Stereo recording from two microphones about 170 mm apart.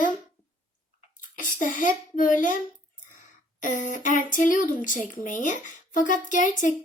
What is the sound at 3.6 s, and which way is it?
Speech, 50° left (ahead or behind).